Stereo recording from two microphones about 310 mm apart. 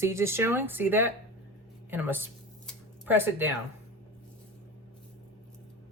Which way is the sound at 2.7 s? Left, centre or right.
Centre.